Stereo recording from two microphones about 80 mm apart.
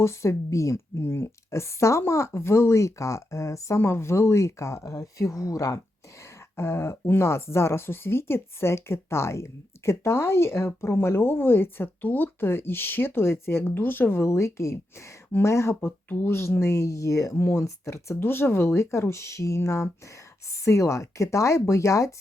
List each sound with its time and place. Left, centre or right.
0.0 s speech: left
6.6 s speech: left